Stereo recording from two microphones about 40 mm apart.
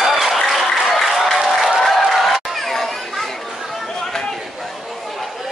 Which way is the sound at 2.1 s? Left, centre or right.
Centre.